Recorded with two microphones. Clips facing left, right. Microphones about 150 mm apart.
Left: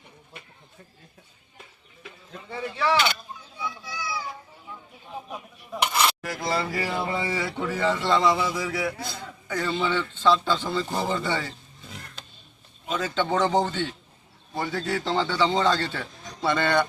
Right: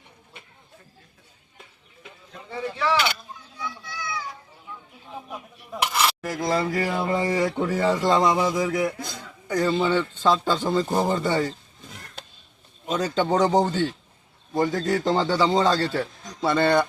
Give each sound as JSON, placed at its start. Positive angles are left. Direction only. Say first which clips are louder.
{"t": 3.6, "sound": "children playing", "louder": "even", "side_deg": 5}
{"t": 5.8, "sound": "cutlery", "louder": "even", "side_deg": 0}
{"t": 6.2, "sound": "a man's voice", "louder": "right 4 dB", "side_deg": -45}
{"t": 12.2, "sound": "roaring cats", "louder": "right 3 dB", "side_deg": -60}
{"t": 12.8, "sound": "speech", "louder": "right 3 dB", "side_deg": -45}
{"t": 13.4, "sound": "a man's voice", "louder": "right 3 dB", "side_deg": -10}
{"t": 13.7, "sound": "a man's voice", "louder": "right 5 dB", "side_deg": -40}